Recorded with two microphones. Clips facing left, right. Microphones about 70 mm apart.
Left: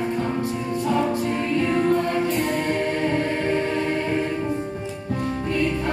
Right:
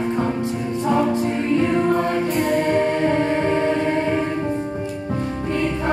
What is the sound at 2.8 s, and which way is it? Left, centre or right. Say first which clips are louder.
Music: right 4 dB; right.